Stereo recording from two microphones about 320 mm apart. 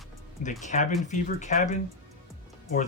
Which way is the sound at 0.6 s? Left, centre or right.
Left.